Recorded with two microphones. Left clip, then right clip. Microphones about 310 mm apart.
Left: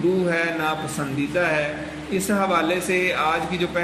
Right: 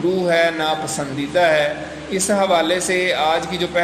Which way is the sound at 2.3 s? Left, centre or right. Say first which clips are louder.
Right 5 dB; centre.